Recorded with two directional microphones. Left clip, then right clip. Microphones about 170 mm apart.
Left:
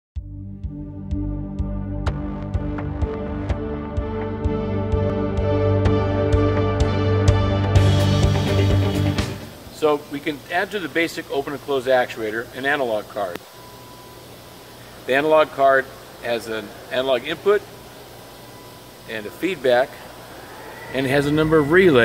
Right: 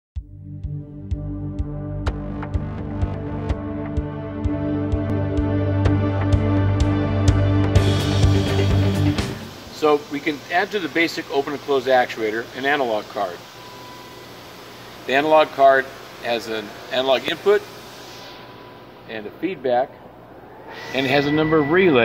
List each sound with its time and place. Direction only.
1.6 s music: centre (ahead or behind)
9.8 s speech: 15° left (ahead or behind)
15.0 s speech: 20° left (ahead or behind)
19.0 s speech: 30° left (ahead or behind)
20.9 s speech: 30° left (ahead or behind)